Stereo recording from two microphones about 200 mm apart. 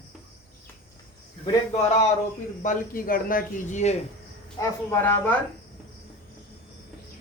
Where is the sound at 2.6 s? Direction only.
40° left (ahead or behind).